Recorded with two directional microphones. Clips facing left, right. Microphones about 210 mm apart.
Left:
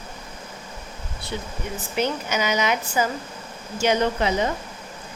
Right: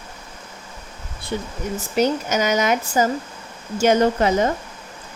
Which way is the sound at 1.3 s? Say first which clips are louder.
Right 5 dB; 50° right (ahead or behind).